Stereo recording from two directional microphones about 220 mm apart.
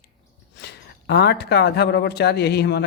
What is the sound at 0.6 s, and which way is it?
A man's voice, 50° left (ahead or behind).